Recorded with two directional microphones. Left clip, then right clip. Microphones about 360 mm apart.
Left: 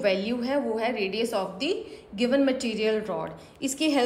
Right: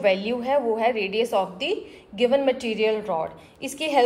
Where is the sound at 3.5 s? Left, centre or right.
Centre.